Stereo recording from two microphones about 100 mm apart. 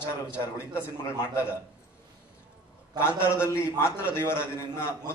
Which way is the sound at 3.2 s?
25° left (ahead or behind).